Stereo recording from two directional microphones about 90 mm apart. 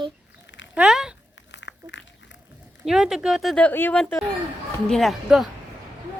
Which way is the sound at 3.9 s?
5° left (ahead or behind).